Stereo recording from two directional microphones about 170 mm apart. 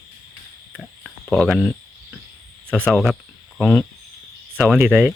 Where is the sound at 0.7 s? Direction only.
5° left (ahead or behind).